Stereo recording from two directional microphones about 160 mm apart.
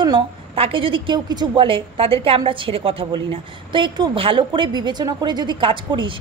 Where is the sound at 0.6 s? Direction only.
35° right (ahead or behind).